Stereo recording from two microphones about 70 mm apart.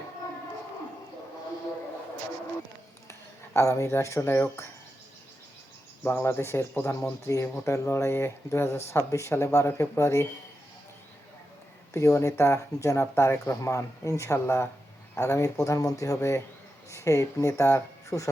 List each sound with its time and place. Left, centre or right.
3.1 s a sound: left
6.0 s speech: left
11.9 s speech: left